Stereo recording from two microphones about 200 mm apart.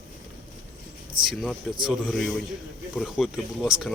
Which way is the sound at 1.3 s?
Centre (ahead or behind).